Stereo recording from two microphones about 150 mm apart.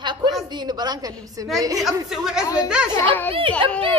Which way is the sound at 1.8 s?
5° right (ahead or behind).